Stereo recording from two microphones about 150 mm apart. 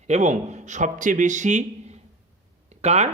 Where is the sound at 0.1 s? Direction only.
50° right (ahead or behind).